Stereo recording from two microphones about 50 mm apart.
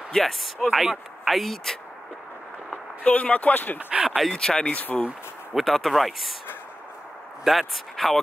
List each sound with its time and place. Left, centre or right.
0.1 s speech: centre
3.0 s speech: left
3.9 s a sound: centre
4.3 s speech: centre
5.5 s speech: centre
7.4 s speech: centre